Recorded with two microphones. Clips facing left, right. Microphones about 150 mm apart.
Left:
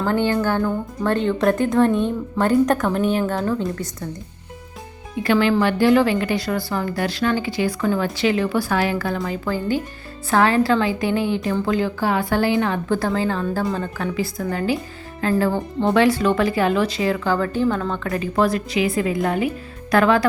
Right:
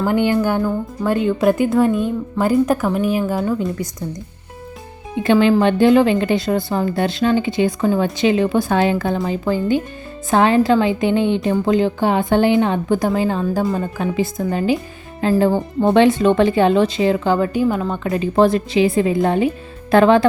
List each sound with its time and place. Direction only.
0.0 s speech: 15° right (ahead or behind)
5.2 s speech: 20° right (ahead or behind)